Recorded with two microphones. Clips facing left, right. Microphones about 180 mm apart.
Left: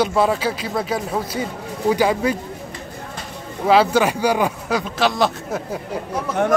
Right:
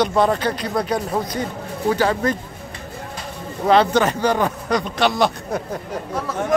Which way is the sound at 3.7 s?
5° left (ahead or behind).